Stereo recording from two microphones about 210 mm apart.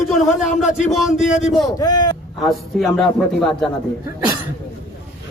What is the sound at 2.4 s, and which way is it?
A man's voice, centre (ahead or behind).